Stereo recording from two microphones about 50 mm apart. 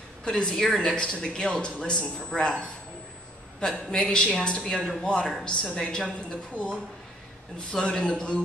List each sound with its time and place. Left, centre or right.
0.3 s a man's voice: centre
6.5 s a man's voice: left
7.7 s a man's voice: centre
8.0 s a man's voice: left